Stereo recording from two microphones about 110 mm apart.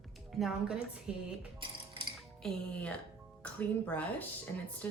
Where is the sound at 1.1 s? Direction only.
5° right (ahead or behind).